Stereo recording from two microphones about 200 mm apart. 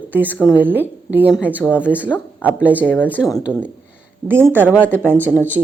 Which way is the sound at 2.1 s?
10° left (ahead or behind).